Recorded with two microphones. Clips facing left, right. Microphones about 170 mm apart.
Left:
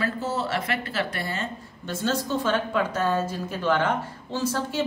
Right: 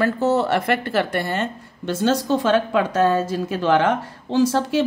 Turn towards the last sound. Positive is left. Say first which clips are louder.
# right 9 dB
turn(degrees=-90)